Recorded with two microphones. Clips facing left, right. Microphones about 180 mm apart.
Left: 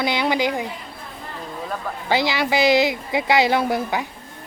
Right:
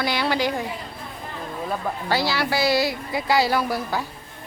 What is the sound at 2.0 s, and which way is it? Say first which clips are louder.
Speech: left 4 dB; 20° left (ahead or behind).